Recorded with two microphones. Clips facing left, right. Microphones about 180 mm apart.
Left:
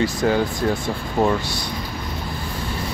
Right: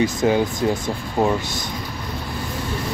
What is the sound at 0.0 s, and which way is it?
Speech, 20° right (ahead or behind).